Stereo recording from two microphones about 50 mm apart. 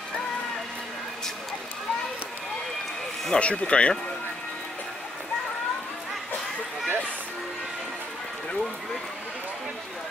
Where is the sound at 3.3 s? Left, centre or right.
Left.